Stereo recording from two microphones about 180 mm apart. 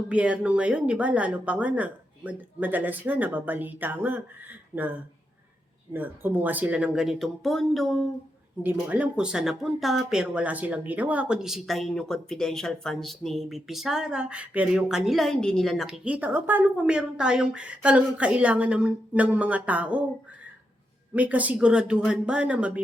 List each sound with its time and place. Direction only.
0.1 s speech: 5° right (ahead or behind)
21.1 s speech: 10° right (ahead or behind)